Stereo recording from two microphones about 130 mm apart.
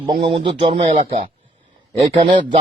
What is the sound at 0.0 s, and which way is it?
A man's voice, 45° right (ahead or behind).